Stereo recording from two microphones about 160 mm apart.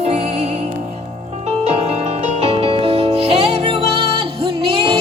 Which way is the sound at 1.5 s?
40° right (ahead or behind).